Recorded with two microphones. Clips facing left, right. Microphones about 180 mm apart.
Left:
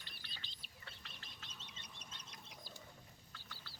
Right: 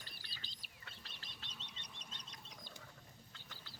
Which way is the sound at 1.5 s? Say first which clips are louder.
Right 1 dB; 5° left (ahead or behind).